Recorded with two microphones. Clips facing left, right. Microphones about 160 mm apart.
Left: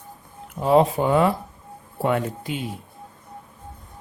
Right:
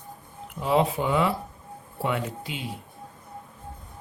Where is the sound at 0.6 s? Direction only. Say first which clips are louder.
Left 6 dB; 45° left (ahead or behind).